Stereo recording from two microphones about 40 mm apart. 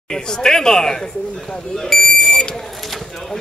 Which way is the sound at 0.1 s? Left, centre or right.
Centre.